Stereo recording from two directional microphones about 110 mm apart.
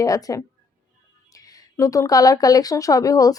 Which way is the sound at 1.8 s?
30° left (ahead or behind).